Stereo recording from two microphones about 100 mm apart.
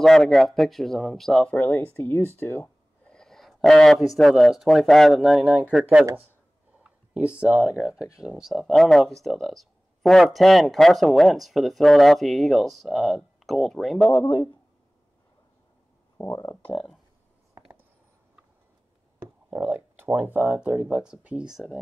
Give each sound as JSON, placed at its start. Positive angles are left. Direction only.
{"t": 0.0, "sound": "speech", "side_deg": 5}
{"t": 1.6, "sound": "speech", "side_deg": 20}
{"t": 3.1, "sound": "speech", "side_deg": 5}
{"t": 16.3, "sound": "speech", "side_deg": 35}
{"t": 19.5, "sound": "speech", "side_deg": -15}